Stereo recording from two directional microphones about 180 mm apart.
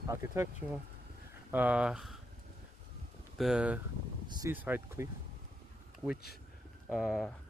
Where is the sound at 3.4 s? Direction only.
5° right (ahead or behind).